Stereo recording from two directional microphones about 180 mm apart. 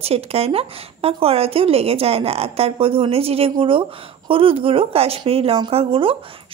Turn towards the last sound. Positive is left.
turn(degrees=-30)  # may be behind; listen again after turning